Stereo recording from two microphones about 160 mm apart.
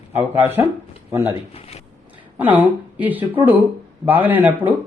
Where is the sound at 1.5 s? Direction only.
40° left (ahead or behind).